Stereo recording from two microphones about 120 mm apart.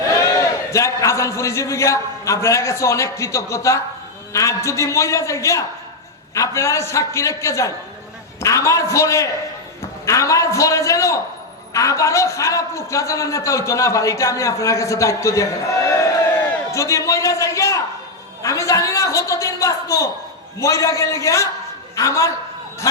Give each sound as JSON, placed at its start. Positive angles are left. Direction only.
{"t": 0.2, "sound": "a man's voice", "side_deg": 30}
{"t": 16.7, "sound": "a man's voice", "side_deg": 25}